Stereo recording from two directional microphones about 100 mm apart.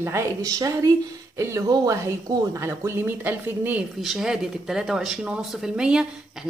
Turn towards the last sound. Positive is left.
turn(degrees=-5)  # may be behind; listen again after turning